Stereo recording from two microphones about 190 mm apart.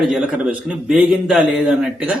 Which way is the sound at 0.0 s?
5° right (ahead or behind).